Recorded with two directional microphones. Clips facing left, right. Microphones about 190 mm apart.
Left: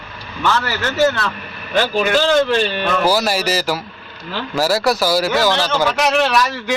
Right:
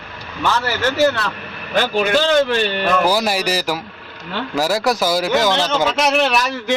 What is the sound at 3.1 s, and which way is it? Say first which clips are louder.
A man's voice: left 1 dB; 15° right (ahead or behind).